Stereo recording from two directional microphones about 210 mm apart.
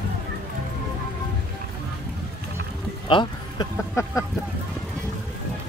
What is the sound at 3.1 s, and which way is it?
Speech, 20° left (ahead or behind).